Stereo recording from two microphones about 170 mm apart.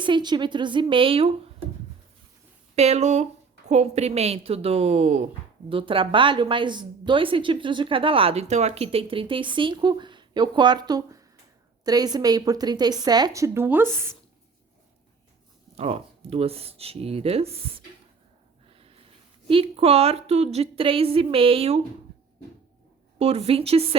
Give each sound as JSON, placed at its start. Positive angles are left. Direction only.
{"t": 0.0, "sound": "a woman's voice", "side_deg": -25}
{"t": 2.7, "sound": "a woman's voice", "side_deg": -40}
{"t": 15.7, "sound": "a woman's voice", "side_deg": -40}
{"t": 18.7, "sound": "snort", "side_deg": -35}
{"t": 19.5, "sound": "a woman's voice", "side_deg": -35}
{"t": 23.1, "sound": "a woman's voice", "side_deg": -35}